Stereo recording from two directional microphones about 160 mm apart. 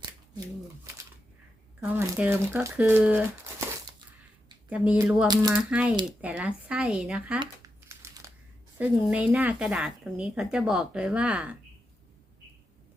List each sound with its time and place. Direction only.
1.8 s speech: 10° right (ahead or behind)
4.7 s speech: 10° right (ahead or behind)
5.3 s speech: 25° right (ahead or behind)
5.5 s speech: 10° right (ahead or behind)
7.9 s crumpling: 20° right (ahead or behind)
8.8 s speech: 10° right (ahead or behind)